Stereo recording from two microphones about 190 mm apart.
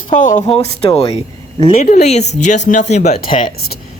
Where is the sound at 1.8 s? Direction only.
35° left (ahead or behind).